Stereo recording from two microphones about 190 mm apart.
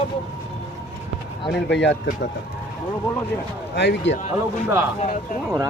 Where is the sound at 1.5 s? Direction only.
65° left (ahead or behind).